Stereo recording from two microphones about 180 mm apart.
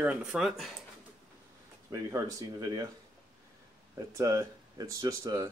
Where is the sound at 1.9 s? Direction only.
20° right (ahead or behind).